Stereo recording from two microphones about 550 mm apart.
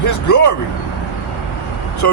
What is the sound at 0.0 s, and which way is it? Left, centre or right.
Speech, left.